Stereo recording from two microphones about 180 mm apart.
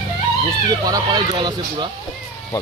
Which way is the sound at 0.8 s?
20° right (ahead or behind).